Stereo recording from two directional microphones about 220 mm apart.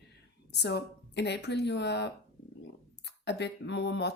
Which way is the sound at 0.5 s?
50° left (ahead or behind).